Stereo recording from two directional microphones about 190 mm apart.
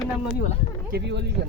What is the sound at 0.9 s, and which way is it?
Speech, 65° right (ahead or behind).